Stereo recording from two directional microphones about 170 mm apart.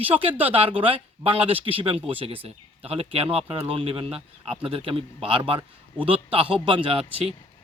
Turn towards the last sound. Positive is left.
turn(degrees=-30)  # may be behind; listen again after turning